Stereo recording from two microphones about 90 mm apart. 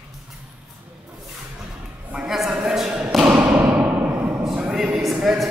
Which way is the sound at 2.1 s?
5° right (ahead or behind).